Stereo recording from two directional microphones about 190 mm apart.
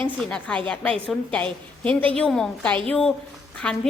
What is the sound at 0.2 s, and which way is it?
A woman's voice, 5° left (ahead or behind).